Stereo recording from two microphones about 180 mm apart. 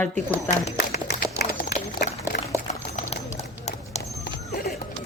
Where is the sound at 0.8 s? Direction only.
60° left (ahead or behind).